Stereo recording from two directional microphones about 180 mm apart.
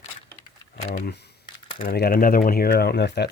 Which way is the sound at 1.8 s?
55° left (ahead or behind).